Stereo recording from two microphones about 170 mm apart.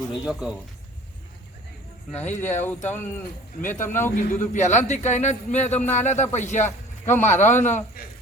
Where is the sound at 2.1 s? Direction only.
10° left (ahead or behind).